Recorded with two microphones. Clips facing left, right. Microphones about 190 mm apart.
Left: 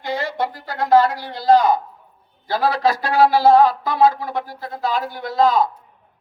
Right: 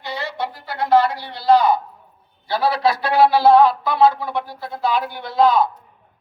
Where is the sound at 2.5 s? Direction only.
45° left (ahead or behind).